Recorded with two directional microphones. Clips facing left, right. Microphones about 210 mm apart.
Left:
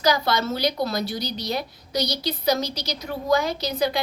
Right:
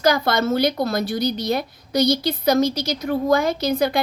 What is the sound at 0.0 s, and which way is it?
A woman's voice, 50° right (ahead or behind).